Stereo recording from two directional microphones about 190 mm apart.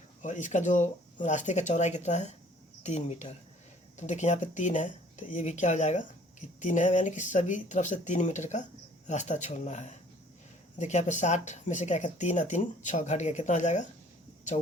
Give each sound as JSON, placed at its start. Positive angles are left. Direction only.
{"t": 0.2, "sound": "speech", "side_deg": 40}